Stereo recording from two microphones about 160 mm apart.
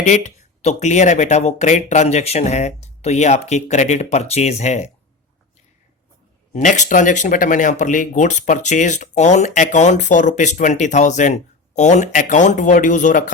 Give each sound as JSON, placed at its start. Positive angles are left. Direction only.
{"t": 0.0, "sound": "speech", "side_deg": 50}
{"t": 6.5, "sound": "speech", "side_deg": 50}